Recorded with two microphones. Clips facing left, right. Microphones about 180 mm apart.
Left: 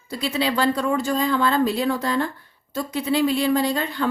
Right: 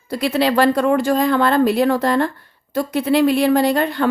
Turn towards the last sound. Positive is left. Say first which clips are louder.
# right 6 dB
turn(degrees=-55)  # may be behind; listen again after turning